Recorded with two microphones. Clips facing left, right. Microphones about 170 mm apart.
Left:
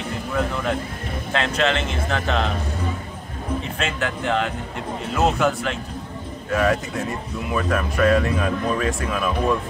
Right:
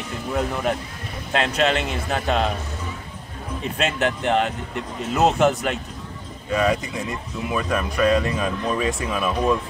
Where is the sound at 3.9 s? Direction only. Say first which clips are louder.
Right 2 dB; 20° right (ahead or behind).